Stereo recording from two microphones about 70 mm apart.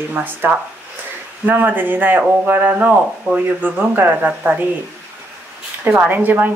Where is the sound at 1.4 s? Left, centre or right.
Right.